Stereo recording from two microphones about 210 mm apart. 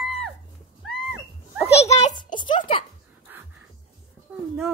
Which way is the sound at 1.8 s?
30° left (ahead or behind).